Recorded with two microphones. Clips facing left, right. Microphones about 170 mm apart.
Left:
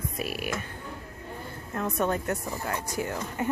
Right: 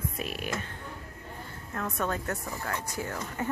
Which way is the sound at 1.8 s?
20° left (ahead or behind).